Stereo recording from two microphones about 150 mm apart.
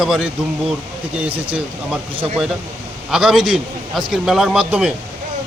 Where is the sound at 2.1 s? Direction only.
40° right (ahead or behind).